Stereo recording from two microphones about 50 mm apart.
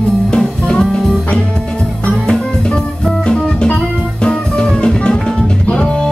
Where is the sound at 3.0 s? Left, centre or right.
Centre.